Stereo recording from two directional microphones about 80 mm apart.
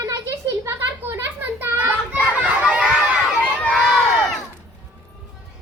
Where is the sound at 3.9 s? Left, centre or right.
Centre.